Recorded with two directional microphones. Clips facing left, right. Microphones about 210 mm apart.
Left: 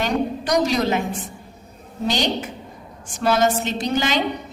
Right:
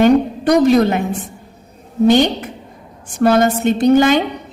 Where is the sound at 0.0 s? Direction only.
55° right (ahead or behind).